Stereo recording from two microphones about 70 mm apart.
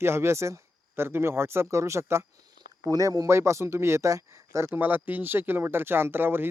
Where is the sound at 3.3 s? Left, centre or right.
Right.